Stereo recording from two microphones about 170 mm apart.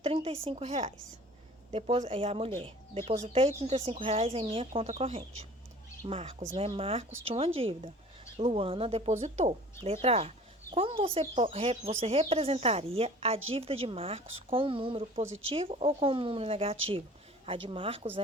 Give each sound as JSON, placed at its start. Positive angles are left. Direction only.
{"t": 0.0, "sound": "a woman's voice", "side_deg": -35}